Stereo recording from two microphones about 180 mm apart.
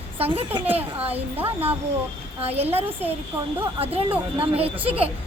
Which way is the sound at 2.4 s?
35° right (ahead or behind).